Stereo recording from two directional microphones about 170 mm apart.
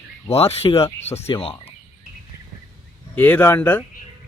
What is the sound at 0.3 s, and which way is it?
Speech, 35° left (ahead or behind).